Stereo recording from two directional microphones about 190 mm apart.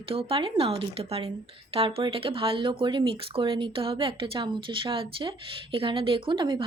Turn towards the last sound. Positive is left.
turn(degrees=-25)  # may be behind; listen again after turning